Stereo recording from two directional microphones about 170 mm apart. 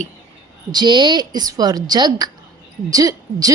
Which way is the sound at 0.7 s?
25° right (ahead or behind).